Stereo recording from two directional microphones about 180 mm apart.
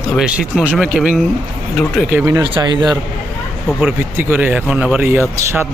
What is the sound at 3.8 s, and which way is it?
Speech, 10° right (ahead or behind).